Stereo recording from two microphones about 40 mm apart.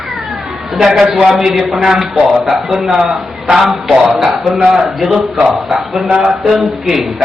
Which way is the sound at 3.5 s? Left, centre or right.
Centre.